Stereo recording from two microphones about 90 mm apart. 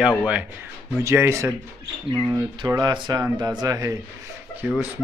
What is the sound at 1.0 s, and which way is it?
Mantra, 30° right (ahead or behind).